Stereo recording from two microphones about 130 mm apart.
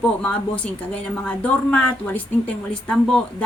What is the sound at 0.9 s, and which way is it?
Speech, 10° left (ahead or behind).